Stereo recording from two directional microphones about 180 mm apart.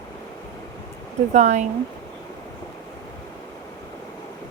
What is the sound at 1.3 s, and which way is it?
Speech, 40° right (ahead or behind).